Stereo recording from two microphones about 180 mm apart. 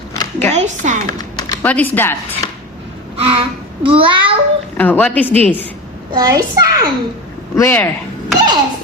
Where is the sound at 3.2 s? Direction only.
30° right (ahead or behind).